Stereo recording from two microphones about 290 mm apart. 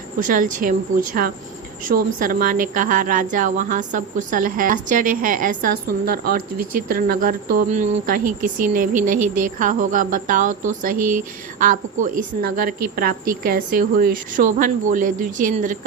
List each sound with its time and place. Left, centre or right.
0.2 s a woman's voice: right